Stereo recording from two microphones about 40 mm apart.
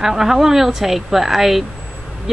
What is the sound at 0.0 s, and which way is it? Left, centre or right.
A woman's voice, centre.